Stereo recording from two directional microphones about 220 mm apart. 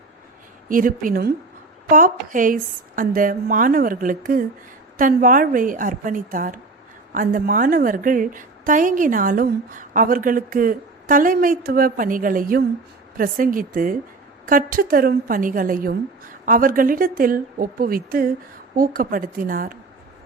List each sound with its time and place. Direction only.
0.7 s a woman's voice: 40° right (ahead or behind)